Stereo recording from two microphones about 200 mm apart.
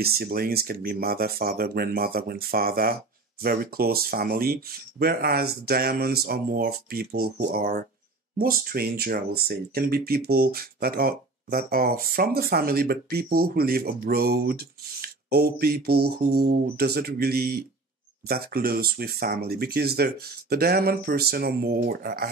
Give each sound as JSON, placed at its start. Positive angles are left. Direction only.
{"t": 0.0, "sound": "speech", "side_deg": -50}